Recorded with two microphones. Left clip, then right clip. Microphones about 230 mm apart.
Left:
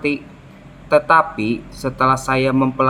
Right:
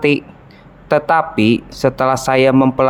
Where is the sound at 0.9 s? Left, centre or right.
Right.